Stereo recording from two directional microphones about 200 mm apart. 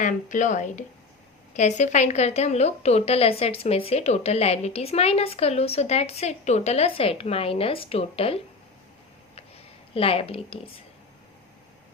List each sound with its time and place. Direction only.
0.0 s a woman's voice: 40° left (ahead or behind)
9.9 s a woman's voice: 30° left (ahead or behind)